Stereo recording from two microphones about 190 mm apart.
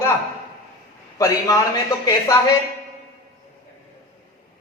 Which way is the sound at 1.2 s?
15° left (ahead or behind).